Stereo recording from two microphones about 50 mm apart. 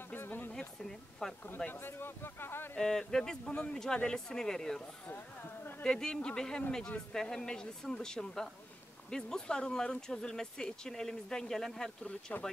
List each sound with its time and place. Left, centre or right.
0.1 s a sound: left
0.5 s speech: centre
1.7 s speech: left
2.8 s speech: centre
5.9 s speech: centre
12.1 s speech: left